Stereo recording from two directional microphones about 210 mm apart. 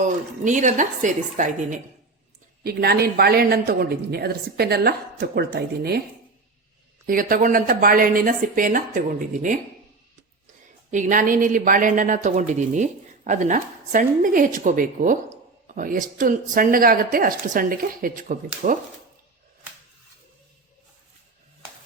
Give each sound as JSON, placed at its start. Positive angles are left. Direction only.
{"t": 0.0, "sound": "speech", "side_deg": -35}
{"t": 2.6, "sound": "speech", "side_deg": -50}
{"t": 7.1, "sound": "speech", "side_deg": -40}
{"t": 10.9, "sound": "speech", "side_deg": -40}